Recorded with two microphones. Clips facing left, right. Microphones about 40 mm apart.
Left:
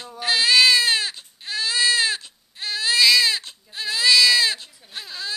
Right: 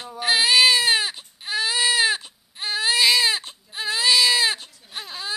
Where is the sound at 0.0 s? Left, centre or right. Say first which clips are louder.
Right 1 dB; centre.